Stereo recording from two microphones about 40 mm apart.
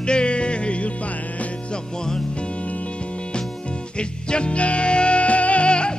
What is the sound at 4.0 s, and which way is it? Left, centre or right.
Music, left.